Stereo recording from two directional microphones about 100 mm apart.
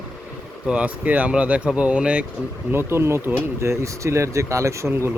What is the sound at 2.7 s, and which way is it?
Speech, 25° right (ahead or behind).